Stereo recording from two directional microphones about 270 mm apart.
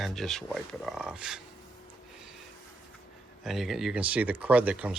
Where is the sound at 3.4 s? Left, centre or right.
Centre.